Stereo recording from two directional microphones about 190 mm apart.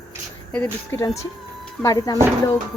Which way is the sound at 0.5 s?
10° left (ahead or behind).